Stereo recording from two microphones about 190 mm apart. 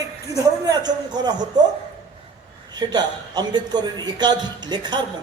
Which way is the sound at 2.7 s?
20° right (ahead or behind).